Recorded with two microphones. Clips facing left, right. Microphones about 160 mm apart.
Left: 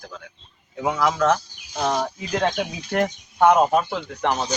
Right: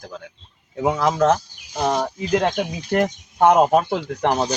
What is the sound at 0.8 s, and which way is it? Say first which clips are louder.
A man's voice: right 3 dB; 20° right (ahead or behind).